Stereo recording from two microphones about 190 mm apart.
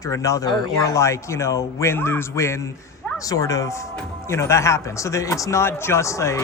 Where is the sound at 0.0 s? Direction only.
15° left (ahead or behind).